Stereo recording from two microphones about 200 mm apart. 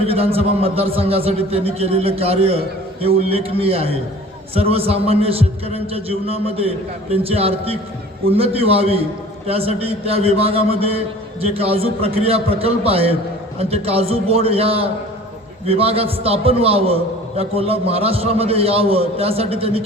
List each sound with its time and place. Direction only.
0.0 s a man's voice: 30° right (ahead or behind)